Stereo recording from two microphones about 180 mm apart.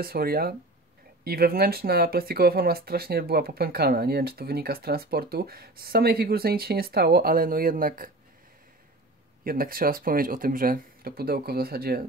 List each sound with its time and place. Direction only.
0.0 s speech: 55° right (ahead or behind)
9.4 s speech: 55° right (ahead or behind)